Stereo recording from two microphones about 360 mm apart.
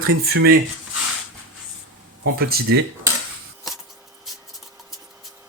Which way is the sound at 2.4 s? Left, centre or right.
Right.